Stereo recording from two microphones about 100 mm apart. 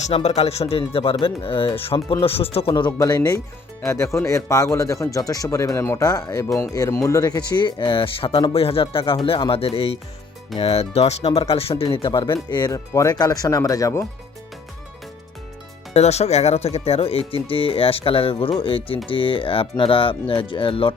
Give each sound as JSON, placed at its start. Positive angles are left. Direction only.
{"t": 0.1, "sound": "speech", "side_deg": 90}
{"t": 2.7, "sound": "speech", "side_deg": 45}
{"t": 3.8, "sound": "speech", "side_deg": 30}
{"t": 10.6, "sound": "speech", "side_deg": 85}
{"t": 15.9, "sound": "speech", "side_deg": 90}